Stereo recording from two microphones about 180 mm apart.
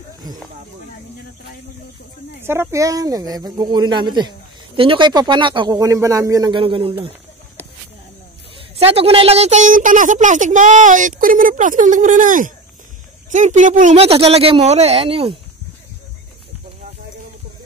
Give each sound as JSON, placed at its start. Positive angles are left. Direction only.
{"t": 2.4, "sound": "speech", "side_deg": -15}
{"t": 8.7, "sound": "a woman's voice", "side_deg": -35}